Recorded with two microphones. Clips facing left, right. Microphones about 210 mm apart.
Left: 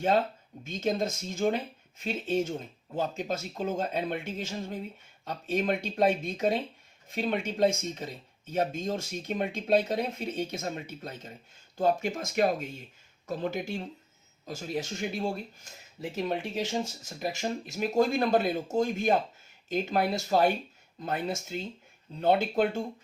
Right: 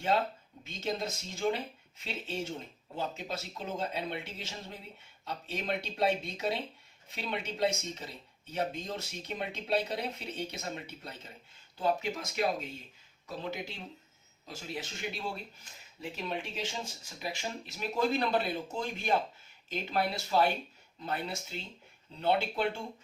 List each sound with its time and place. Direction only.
0.6 s speech: 50° left (ahead or behind)